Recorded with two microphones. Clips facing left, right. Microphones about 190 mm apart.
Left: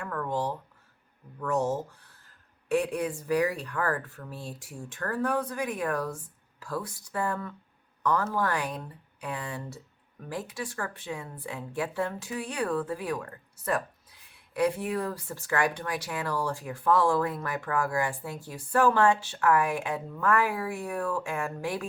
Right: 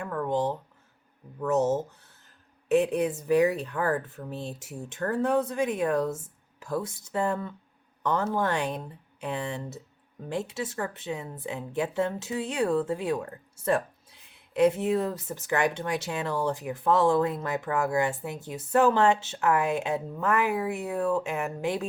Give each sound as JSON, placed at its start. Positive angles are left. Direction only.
{"t": 0.0, "sound": "speech", "side_deg": -20}